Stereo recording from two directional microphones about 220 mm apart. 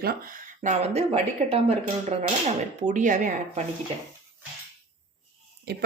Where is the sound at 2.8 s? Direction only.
35° right (ahead or behind).